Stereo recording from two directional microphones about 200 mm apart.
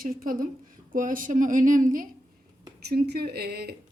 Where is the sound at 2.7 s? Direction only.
55° right (ahead or behind).